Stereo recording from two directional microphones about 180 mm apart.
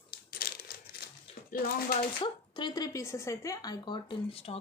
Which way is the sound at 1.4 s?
50° left (ahead or behind).